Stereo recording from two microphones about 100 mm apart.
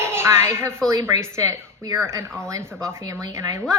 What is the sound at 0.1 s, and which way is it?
A woman's voice, 25° right (ahead or behind).